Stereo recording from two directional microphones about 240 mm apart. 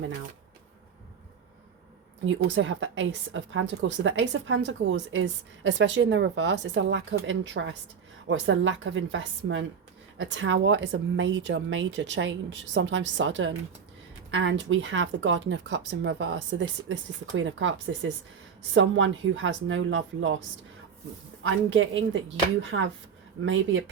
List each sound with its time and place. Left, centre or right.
2.2 s a woman's voice: right
21.4 s a woman's voice: right